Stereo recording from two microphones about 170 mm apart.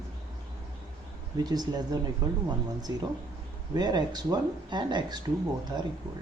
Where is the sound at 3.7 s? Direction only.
25° right (ahead or behind).